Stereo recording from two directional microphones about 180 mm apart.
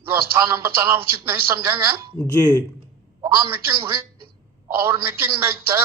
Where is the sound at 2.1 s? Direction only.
15° left (ahead or behind).